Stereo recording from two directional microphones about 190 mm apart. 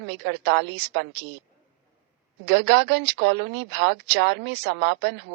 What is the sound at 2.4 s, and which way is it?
Speech, 65° right (ahead or behind).